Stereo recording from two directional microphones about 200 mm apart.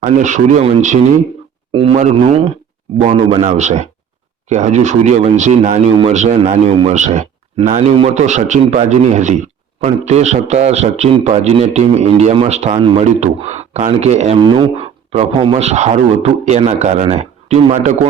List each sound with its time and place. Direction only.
0.0 s a man's voice: 35° right (ahead or behind)